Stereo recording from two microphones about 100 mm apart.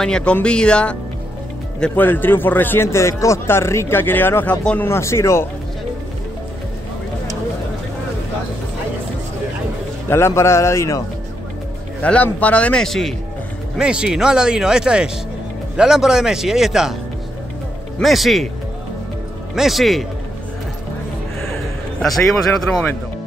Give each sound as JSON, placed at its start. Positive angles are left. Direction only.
{"t": 0.0, "sound": "a man's voice", "side_deg": 10}
{"t": 4.8, "sound": "a man's voice", "side_deg": 25}
{"t": 10.0, "sound": "a man's voice", "side_deg": 25}
{"t": 12.0, "sound": "a man's voice", "side_deg": 15}
{"t": 13.7, "sound": "speech", "side_deg": -10}
{"t": 17.9, "sound": "speech", "side_deg": 0}
{"t": 19.5, "sound": "speech", "side_deg": 0}
{"t": 22.0, "sound": "speech", "side_deg": 0}